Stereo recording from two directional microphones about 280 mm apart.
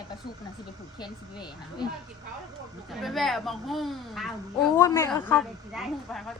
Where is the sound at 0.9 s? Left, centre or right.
Centre.